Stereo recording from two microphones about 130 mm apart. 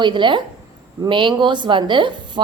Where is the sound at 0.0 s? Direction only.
35° right (ahead or behind).